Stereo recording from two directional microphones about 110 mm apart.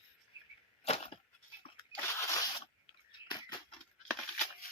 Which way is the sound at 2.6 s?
45° left (ahead or behind).